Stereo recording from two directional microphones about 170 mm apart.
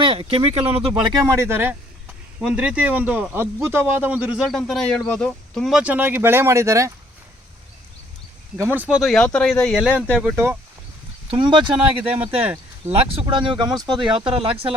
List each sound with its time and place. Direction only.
0.0 s speech: 30° right (ahead or behind)
1.3 s a man's voice: 15° right (ahead or behind)
8.5 s a man's voice: 15° right (ahead or behind)
11.3 s speech: 30° right (ahead or behind)
13.0 s speech: 35° right (ahead or behind)